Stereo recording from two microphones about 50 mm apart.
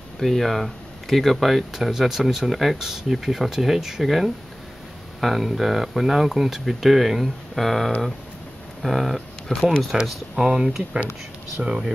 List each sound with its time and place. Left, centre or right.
0.2 s speech: centre
9.9 s speech: centre